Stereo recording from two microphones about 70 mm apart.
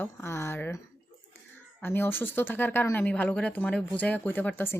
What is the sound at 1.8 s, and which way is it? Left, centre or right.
A woman's voice, left.